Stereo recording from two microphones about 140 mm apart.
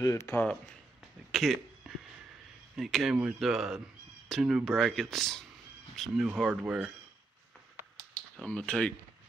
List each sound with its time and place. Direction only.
0.0 s speech: 20° left (ahead or behind)
1.3 s speech: centre (ahead or behind)
1.8 s a sound: 5° right (ahead or behind)
2.7 s speech: centre (ahead or behind)
8.4 s speech: 5° left (ahead or behind)